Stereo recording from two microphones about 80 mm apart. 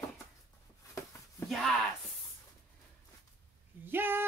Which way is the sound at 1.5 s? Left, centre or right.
Centre.